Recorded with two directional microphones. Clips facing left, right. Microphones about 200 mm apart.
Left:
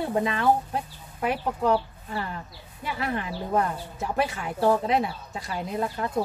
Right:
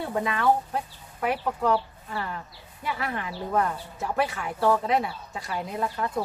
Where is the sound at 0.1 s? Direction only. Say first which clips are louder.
Even; 25° left (ahead or behind).